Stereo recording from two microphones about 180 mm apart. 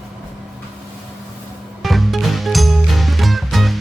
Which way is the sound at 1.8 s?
Centre (ahead or behind).